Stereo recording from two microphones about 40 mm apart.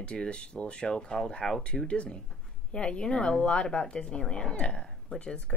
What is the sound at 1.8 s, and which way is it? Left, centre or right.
Speech, left.